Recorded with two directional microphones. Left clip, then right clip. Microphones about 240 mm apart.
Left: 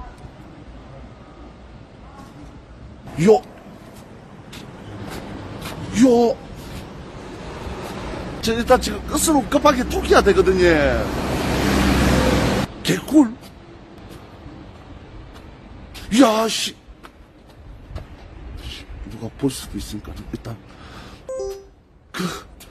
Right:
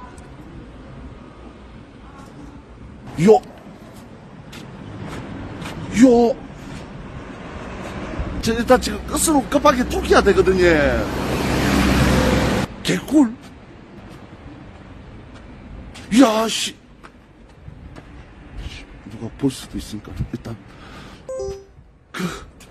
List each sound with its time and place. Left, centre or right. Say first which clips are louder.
3.2 s speech: right 1 dB; centre
5.6 s a sound: right 2 dB; centre
8.4 s speech: even; centre
11.1 s waves: right 1 dB; right
12.8 s speech: left 1 dB; centre
15.9 s a man's voice: even; centre
19.4 s speech: right 1 dB; centre
21.3 s music: even; centre
22.1 s throat clearing: left 1 dB; centre